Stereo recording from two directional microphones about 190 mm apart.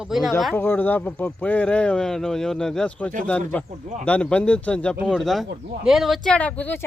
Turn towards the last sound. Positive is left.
turn(degrees=10)  # may be behind; listen again after turning